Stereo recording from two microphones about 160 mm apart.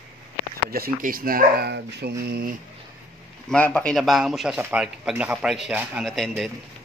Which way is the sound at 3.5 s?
5° left (ahead or behind).